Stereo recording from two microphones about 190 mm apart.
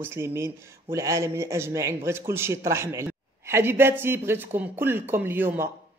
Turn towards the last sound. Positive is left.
turn(degrees=-10)  # may be behind; listen again after turning